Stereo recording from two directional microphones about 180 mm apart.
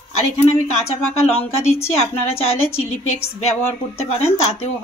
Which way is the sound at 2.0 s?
35° left (ahead or behind).